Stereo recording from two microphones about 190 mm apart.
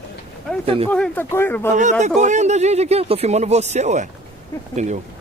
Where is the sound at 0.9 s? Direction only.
5° left (ahead or behind).